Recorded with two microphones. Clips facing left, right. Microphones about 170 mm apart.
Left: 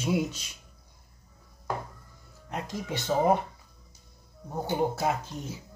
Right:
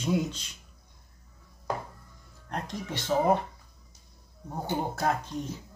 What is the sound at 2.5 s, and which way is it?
Speech, 5° left (ahead or behind).